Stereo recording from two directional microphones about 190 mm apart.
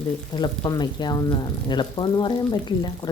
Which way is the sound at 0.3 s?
20° left (ahead or behind).